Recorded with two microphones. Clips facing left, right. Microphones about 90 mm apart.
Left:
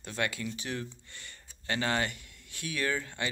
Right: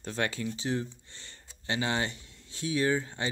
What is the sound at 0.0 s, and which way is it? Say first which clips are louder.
Speech: right 2 dB; 35° right (ahead or behind).